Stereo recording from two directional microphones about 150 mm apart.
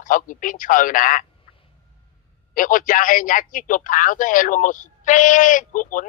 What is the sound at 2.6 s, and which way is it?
A man's voice, 65° left (ahead or behind).